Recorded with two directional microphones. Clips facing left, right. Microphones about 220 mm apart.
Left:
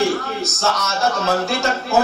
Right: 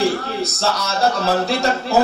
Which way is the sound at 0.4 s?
35° right (ahead or behind).